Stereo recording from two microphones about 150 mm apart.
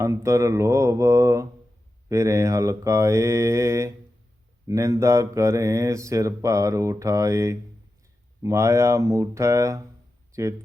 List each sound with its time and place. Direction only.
0.0 s speech: 20° right (ahead or behind)